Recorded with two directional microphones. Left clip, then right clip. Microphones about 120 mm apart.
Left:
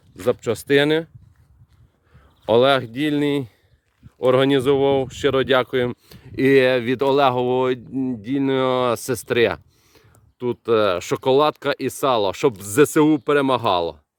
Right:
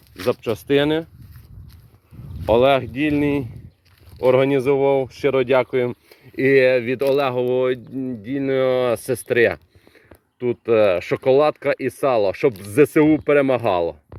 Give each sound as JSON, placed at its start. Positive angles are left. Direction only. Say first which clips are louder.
{"t": 0.3, "sound": "speech", "louder": "left 1 dB", "side_deg": 30}
{"t": 2.5, "sound": "speech", "louder": "even", "side_deg": 40}
{"t": 9.1, "sound": "speech", "louder": "right 2 dB", "side_deg": 45}
{"t": 10.4, "sound": "speech", "louder": "right 2 dB", "side_deg": 30}